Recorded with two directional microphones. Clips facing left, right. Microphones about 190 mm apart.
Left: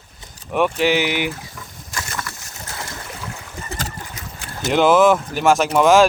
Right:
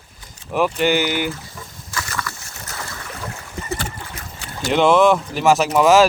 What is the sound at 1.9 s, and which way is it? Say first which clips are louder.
Boat: right 1 dB; 25° left (ahead or behind).